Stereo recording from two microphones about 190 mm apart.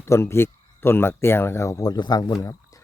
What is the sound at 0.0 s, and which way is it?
Speech, 15° left (ahead or behind).